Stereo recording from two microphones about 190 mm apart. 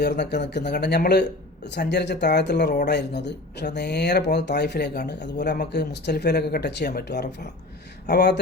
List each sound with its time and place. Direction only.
0.0 s speech: 65° left (ahead or behind)